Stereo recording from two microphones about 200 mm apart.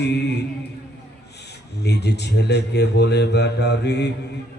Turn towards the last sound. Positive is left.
turn(degrees=55)  # may be behind; listen again after turning